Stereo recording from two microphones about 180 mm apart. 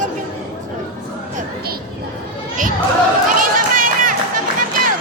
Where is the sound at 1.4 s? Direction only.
55° right (ahead or behind).